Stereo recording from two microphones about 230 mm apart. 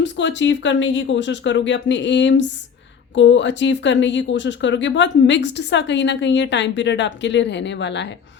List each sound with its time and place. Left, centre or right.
0.0 s speech: left